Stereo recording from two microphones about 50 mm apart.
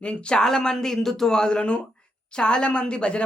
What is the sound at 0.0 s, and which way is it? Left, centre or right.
Speech, left.